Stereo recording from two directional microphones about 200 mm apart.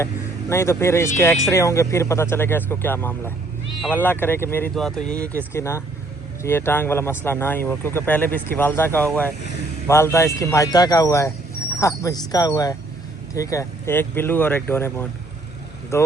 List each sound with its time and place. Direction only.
0.5 s speech: 15° left (ahead or behind)